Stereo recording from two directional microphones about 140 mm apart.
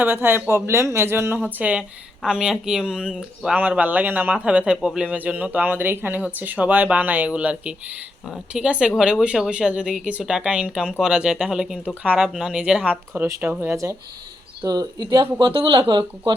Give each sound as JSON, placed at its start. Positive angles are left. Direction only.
{"t": 0.0, "sound": "speech", "side_deg": -15}